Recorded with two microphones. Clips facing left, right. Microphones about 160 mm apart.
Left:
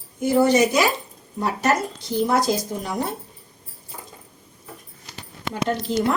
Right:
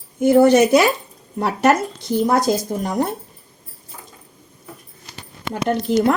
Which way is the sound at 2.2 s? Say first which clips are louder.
Right 3 dB; 50° right (ahead or behind).